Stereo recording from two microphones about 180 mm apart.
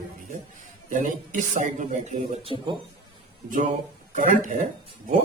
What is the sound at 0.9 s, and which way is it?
Speech, 45° right (ahead or behind).